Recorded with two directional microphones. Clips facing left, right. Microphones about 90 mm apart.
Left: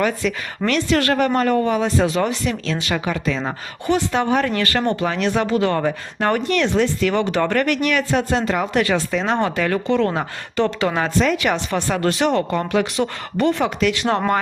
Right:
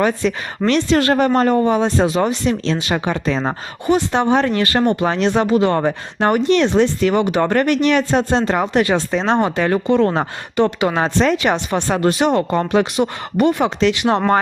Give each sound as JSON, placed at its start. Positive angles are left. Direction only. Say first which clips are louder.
{"t": 0.0, "sound": "speech", "louder": "right 3 dB", "side_deg": -30}
{"t": 3.8, "sound": "speech", "louder": "right 3 dB", "side_deg": -20}